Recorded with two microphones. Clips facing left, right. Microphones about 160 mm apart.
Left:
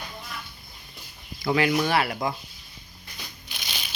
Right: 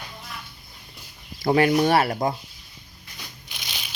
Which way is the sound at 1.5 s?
40° right (ahead or behind).